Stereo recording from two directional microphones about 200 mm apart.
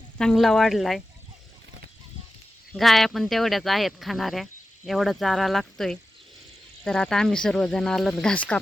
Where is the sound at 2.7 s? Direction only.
Centre (ahead or behind).